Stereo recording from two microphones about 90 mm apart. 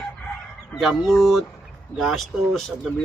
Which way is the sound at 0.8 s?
Centre (ahead or behind).